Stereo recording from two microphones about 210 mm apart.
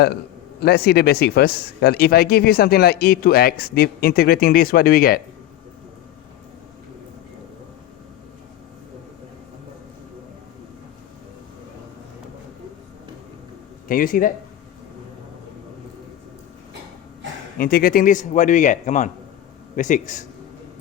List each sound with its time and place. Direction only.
0.6 s speech: 50° left (ahead or behind)
13.8 s a man's voice: 40° left (ahead or behind)
17.6 s a man's voice: 45° left (ahead or behind)